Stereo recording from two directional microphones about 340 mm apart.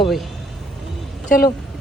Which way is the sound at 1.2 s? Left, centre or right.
Left.